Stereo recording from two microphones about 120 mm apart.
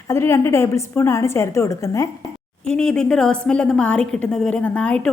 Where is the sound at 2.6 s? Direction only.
5° left (ahead or behind).